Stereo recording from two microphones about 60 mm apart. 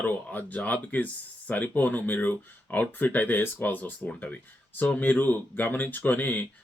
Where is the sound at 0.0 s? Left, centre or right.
Left.